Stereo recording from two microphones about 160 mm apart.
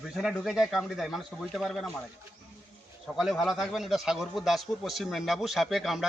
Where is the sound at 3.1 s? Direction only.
Centre (ahead or behind).